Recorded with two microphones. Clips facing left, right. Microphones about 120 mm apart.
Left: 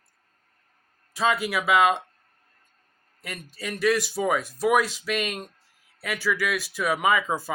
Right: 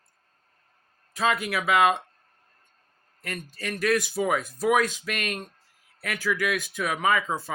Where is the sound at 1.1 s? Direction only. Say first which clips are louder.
Left 1 dB; centre (ahead or behind).